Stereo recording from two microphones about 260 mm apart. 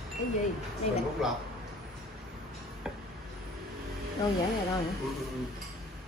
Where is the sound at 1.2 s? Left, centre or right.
Centre.